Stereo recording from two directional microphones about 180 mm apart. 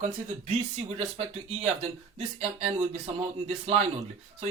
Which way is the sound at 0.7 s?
35° right (ahead or behind).